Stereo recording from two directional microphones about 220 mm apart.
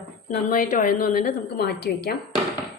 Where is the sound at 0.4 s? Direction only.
35° left (ahead or behind).